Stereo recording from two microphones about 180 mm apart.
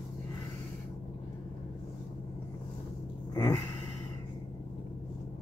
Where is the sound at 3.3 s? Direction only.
20° left (ahead or behind).